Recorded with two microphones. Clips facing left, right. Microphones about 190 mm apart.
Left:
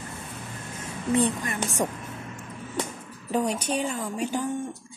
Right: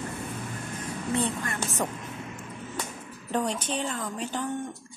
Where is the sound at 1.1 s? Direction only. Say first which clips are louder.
Left 5 dB; 15° left (ahead or behind).